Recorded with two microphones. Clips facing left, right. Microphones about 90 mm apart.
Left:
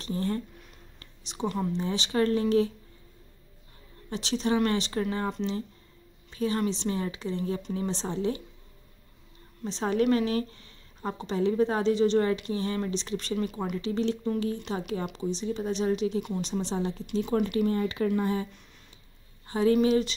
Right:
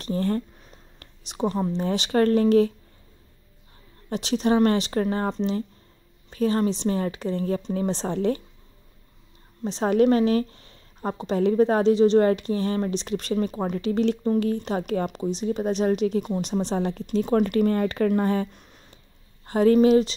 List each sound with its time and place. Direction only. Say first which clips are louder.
0.0 s a woman's voice: right 5 dB; 45° right (ahead or behind)
1.8 s speech: right 6 dB; 50° right (ahead or behind)
4.1 s a woman's voice: right 5 dB; 45° right (ahead or behind)
7.9 s speech: right 5 dB; 55° right (ahead or behind)
9.7 s a woman's voice: right 5 dB; 45° right (ahead or behind)
16.6 s speech: right 5 dB; 60° right (ahead or behind)
17.0 s a woman's voice: right 6 dB; 45° right (ahead or behind)